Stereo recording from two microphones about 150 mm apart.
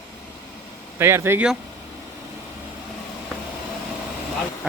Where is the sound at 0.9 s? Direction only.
15° right (ahead or behind).